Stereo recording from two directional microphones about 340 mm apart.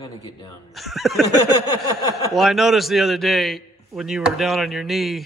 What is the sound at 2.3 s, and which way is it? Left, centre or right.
A man's voice, centre.